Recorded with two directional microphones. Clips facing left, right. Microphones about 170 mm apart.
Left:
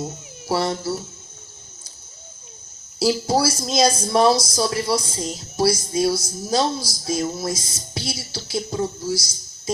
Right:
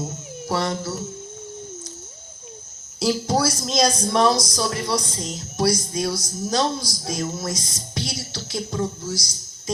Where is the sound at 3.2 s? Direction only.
30° left (ahead or behind).